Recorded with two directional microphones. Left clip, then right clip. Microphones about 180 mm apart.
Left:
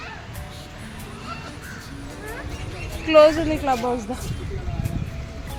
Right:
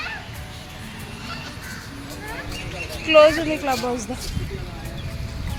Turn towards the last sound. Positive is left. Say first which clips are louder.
# left 1 dB
turn(degrees=20)  # may be behind; listen again after turning